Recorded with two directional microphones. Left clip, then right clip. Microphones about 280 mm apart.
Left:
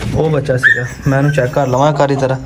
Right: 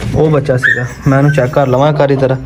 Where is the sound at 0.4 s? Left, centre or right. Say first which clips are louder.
Even; centre.